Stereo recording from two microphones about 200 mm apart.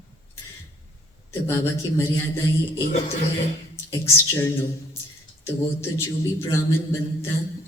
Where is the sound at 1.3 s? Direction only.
15° left (ahead or behind).